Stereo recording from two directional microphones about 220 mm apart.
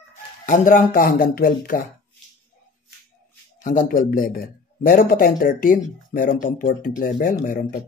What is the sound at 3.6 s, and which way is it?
A man's voice, 35° left (ahead or behind).